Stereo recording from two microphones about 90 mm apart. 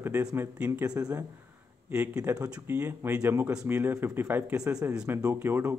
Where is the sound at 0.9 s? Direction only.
40° right (ahead or behind).